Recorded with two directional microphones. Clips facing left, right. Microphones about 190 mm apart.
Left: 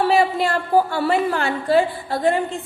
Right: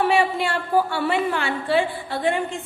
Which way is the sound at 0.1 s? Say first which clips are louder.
Left 3 dB; 35° left (ahead or behind).